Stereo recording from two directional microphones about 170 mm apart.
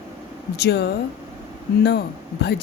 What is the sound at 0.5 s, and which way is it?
Speech, 75° left (ahead or behind).